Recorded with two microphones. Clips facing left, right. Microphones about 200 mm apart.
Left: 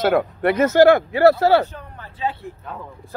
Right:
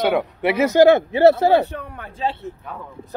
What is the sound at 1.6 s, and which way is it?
Speech, 70° right (ahead or behind).